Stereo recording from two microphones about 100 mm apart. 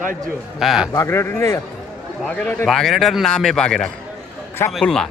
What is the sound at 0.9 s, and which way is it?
Speech, 25° left (ahead or behind).